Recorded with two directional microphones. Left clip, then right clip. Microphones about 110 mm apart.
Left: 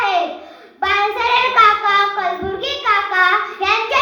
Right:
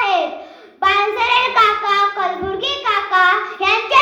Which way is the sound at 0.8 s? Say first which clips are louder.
Right 1 dB; 25° right (ahead or behind).